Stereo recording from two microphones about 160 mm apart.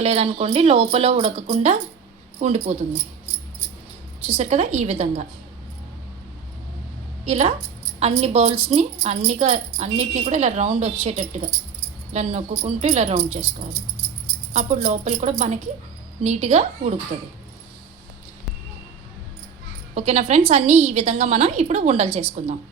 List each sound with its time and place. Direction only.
0.0 s a woman's voice: 40° right (ahead or behind)
4.3 s a woman's voice: 45° right (ahead or behind)
7.3 s a woman's voice: 40° right (ahead or behind)
14.5 s a woman's voice: 50° right (ahead or behind)
19.9 s a woman's voice: 45° right (ahead or behind)